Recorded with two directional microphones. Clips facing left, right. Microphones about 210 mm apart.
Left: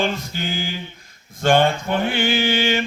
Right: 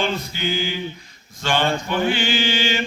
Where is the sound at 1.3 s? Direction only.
55° left (ahead or behind).